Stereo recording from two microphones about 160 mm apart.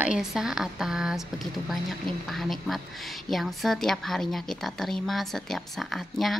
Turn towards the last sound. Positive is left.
turn(degrees=0)  # may be behind; listen again after turning